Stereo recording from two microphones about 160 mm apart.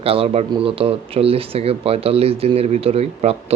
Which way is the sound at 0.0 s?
35° right (ahead or behind).